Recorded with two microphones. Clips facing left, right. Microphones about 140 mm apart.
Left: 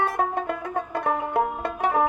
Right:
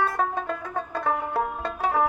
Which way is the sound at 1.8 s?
15° left (ahead or behind).